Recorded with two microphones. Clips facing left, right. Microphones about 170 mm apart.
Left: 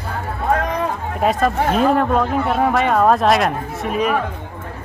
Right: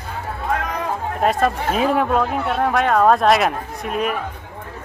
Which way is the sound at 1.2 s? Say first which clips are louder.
Left 2 dB; centre (ahead or behind).